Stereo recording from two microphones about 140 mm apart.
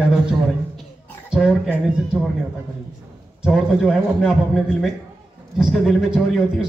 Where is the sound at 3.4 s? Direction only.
5° right (ahead or behind).